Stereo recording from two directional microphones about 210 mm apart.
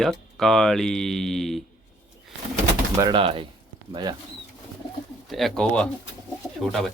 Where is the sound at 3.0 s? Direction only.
20° right (ahead or behind).